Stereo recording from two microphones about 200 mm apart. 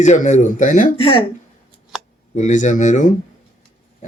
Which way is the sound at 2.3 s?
35° left (ahead or behind).